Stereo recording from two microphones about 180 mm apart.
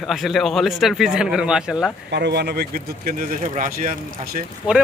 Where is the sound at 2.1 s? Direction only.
70° right (ahead or behind); by 3.9 s 50° right (ahead or behind).